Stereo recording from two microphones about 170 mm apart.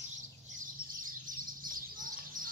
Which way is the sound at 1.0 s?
55° right (ahead or behind).